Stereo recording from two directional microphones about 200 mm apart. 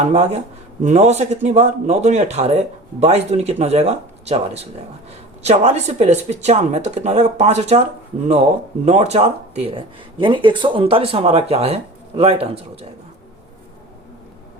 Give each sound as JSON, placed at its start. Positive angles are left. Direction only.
{"t": 0.0, "sound": "speech", "side_deg": -30}
{"t": 8.8, "sound": "speech", "side_deg": -35}